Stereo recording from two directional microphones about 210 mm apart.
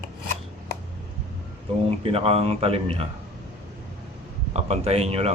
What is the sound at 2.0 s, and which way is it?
Speech, 30° right (ahead or behind).